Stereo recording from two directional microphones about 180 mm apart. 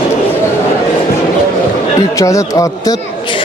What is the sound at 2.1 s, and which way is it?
Speech, 15° left (ahead or behind).